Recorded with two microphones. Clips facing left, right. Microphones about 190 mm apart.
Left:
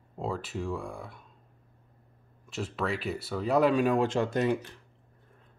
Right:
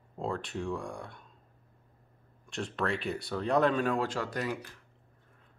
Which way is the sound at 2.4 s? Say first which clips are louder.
Left 1 dB; 5° left (ahead or behind).